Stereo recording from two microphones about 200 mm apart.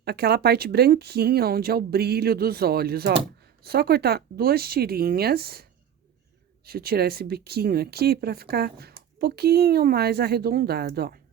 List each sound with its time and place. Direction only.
0.0 s speech: 55° right (ahead or behind)
6.7 s speech: 50° right (ahead or behind)